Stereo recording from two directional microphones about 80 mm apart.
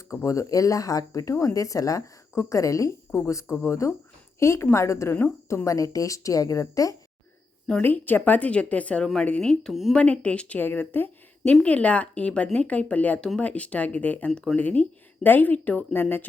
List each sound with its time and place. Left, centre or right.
0.1 s speech: left
7.7 s speech: left
9.4 s speech: centre
9.9 s a woman's voice: centre